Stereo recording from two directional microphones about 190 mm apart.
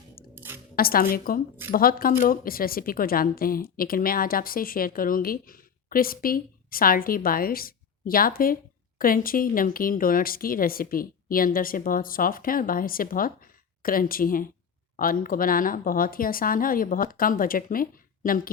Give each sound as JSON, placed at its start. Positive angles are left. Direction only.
{"t": 0.3, "sound": "dishes", "side_deg": -10}
{"t": 0.8, "sound": "a woman's voice", "side_deg": 50}